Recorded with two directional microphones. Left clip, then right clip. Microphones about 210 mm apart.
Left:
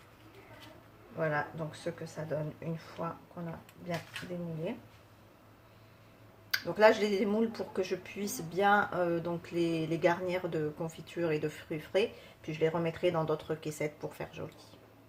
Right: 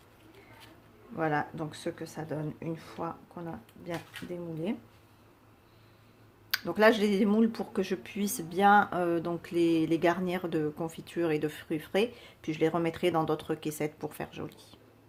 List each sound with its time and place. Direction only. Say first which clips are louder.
1.2 s speech: right 2 dB; 50° right (ahead or behind)
6.5 s speech: right 1 dB; 30° right (ahead or behind)